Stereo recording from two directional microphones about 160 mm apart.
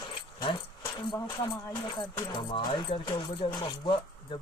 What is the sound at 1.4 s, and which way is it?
Speech, 25° left (ahead or behind).